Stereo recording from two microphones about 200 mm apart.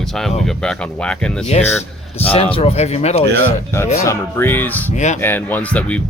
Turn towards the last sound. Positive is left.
turn(degrees=5)  # may be behind; listen again after turning